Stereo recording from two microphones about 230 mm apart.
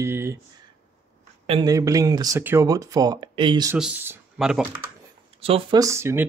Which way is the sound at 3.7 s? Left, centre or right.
Centre.